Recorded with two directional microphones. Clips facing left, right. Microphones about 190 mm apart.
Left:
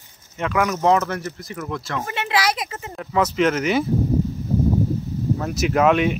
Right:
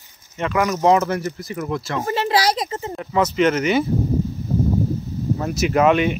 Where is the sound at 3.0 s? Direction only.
Centre (ahead or behind).